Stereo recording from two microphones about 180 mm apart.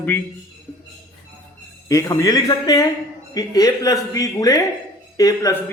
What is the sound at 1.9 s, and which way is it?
Speech, 20° left (ahead or behind).